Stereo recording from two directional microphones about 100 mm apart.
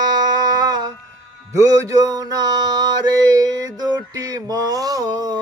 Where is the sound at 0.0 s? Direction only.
40° right (ahead or behind).